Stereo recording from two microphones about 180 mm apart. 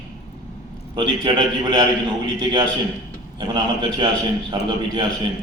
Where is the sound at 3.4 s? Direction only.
25° right (ahead or behind).